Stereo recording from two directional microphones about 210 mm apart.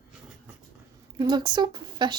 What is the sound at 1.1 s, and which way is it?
Speech, 20° right (ahead or behind).